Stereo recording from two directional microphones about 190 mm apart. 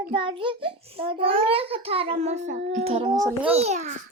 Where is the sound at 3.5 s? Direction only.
35° right (ahead or behind).